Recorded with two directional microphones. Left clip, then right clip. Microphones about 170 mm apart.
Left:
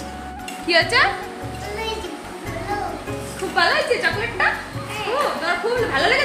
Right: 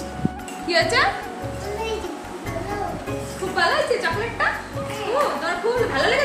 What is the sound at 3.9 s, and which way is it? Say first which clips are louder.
Speech: left 2 dB; 20° left (ahead or behind).